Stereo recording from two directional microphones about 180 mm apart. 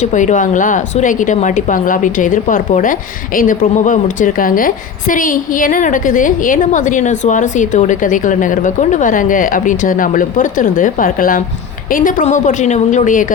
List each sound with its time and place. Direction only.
0.0 s a woman's voice: 40° left (ahead or behind)